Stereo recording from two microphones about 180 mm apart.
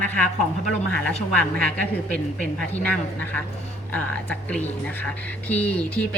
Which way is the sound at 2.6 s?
10° left (ahead or behind).